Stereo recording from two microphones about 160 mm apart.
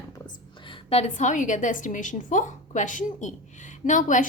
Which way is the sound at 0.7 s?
40° left (ahead or behind).